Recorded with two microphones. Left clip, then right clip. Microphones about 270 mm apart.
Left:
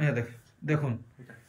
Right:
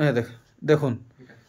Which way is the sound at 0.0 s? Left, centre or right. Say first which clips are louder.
Right 8 dB; centre.